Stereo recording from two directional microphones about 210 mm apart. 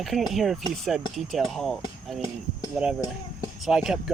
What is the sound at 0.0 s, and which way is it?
Speech, centre (ahead or behind).